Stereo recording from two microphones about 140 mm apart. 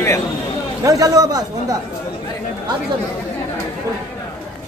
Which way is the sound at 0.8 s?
25° right (ahead or behind).